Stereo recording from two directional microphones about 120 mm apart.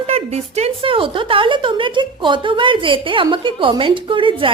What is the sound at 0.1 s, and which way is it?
A woman's voice, 60° right (ahead or behind).